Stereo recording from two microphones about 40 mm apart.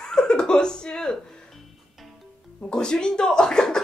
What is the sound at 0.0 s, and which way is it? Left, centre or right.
Chuckle, centre.